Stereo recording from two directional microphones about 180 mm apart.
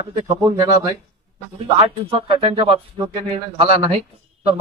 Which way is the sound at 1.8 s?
30° right (ahead or behind).